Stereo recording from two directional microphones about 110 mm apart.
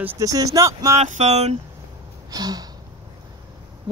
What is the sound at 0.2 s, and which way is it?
Speech, 35° right (ahead or behind).